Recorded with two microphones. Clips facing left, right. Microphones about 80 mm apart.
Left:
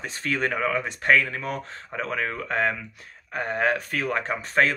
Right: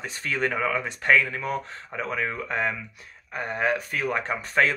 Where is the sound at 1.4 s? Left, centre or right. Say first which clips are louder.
Right 2 dB; centre.